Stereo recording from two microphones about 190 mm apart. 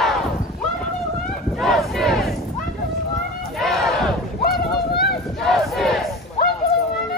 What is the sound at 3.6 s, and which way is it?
Battle cry, centre (ahead or behind).